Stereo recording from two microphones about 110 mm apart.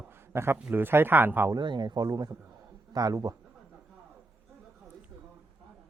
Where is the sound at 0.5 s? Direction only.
15° right (ahead or behind).